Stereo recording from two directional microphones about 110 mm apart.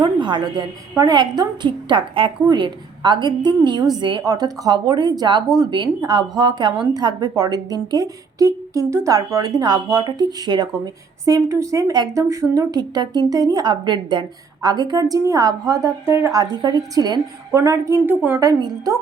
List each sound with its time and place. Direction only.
0.0 s a woman's voice: 45° right (ahead or behind); by 18.2 s 20° right (ahead or behind)